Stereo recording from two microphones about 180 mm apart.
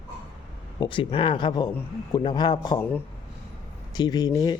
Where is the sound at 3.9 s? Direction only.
20° left (ahead or behind).